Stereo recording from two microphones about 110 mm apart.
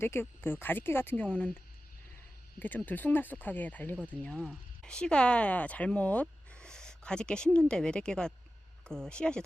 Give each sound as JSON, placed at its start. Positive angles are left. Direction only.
{"t": 0.0, "sound": "speech", "side_deg": 20}
{"t": 2.6, "sound": "speech", "side_deg": 15}
{"t": 3.9, "sound": "speech", "side_deg": -15}
{"t": 4.2, "sound": "speech", "side_deg": 5}